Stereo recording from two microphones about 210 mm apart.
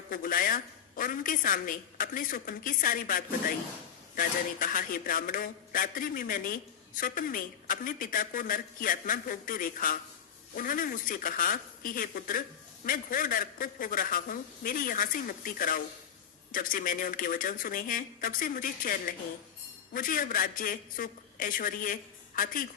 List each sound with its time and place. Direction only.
0.1 s a man's voice: 40° left (ahead or behind)